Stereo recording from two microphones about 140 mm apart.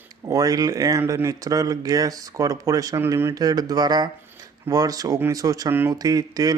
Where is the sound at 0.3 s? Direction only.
25° right (ahead or behind).